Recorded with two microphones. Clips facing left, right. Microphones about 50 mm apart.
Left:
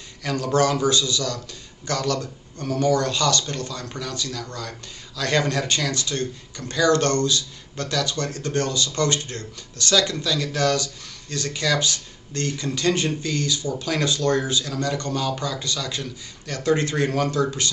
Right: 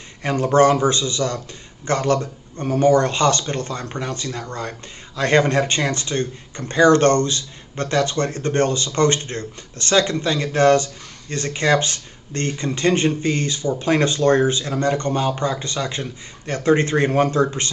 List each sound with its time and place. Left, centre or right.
0.2 s speech: right